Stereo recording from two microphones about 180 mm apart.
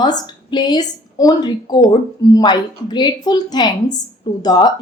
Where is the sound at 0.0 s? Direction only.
25° left (ahead or behind).